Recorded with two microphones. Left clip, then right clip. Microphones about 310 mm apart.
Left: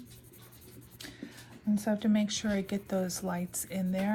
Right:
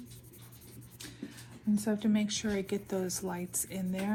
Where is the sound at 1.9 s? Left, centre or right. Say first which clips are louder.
Left 3 dB; left.